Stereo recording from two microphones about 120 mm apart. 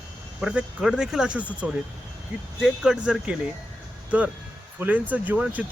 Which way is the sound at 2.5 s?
5° right (ahead or behind).